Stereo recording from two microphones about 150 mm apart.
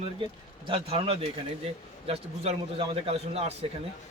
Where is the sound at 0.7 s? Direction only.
40° right (ahead or behind).